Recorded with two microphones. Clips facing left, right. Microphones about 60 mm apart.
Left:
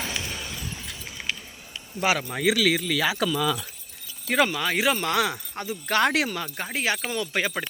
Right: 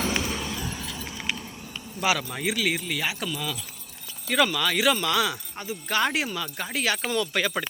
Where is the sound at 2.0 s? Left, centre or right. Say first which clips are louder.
Left 1 dB; left.